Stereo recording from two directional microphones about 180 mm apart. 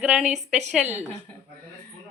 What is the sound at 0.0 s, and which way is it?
Speech, 5° right (ahead or behind).